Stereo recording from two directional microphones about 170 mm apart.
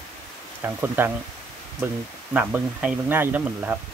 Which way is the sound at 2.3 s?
10° right (ahead or behind).